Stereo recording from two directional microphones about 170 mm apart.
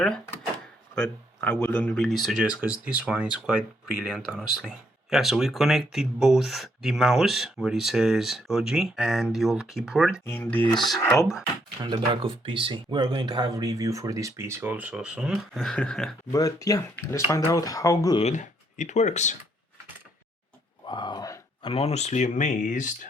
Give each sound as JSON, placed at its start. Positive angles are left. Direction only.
{"t": 0.9, "sound": "speech", "side_deg": 5}
{"t": 10.2, "sound": "speech", "side_deg": 15}
{"t": 11.8, "sound": "speech", "side_deg": -30}
{"t": 16.3, "sound": "speech", "side_deg": 20}
{"t": 18.2, "sound": "speech", "side_deg": 45}
{"t": 20.8, "sound": "groan", "side_deg": 25}
{"t": 21.7, "sound": "speech", "side_deg": 35}